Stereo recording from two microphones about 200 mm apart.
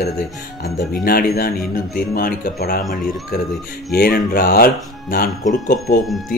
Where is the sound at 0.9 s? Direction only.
50° left (ahead or behind).